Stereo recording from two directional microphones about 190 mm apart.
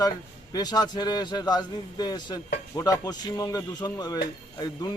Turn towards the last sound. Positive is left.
turn(degrees=20)  # may be behind; listen again after turning